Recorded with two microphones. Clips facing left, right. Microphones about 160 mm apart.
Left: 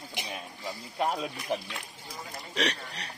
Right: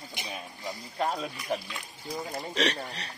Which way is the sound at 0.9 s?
10° left (ahead or behind).